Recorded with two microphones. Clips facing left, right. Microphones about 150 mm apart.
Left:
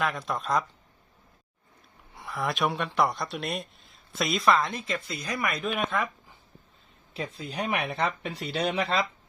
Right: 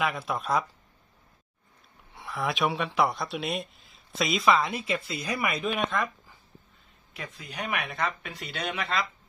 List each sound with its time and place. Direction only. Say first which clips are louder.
0.0 s speech: even; centre (ahead or behind)
2.1 s speech: even; centre (ahead or behind)
7.1 s speech: left 6 dB; 30° left (ahead or behind)